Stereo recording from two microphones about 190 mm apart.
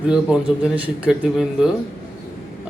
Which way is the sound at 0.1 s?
5° right (ahead or behind).